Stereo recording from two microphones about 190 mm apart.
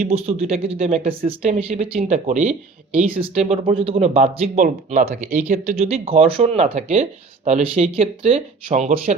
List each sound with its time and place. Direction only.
0.1 s speech: 30° right (ahead or behind)
3.2 s speech: 30° right (ahead or behind)